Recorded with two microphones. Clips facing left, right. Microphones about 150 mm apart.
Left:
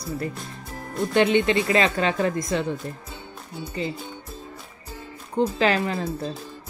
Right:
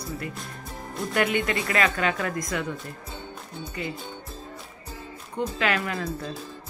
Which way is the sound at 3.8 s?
30° left (ahead or behind).